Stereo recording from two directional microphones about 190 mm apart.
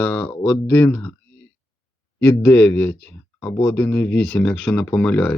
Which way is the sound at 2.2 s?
10° left (ahead or behind).